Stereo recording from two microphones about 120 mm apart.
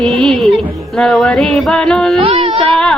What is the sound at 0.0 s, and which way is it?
Music, 5° left (ahead or behind).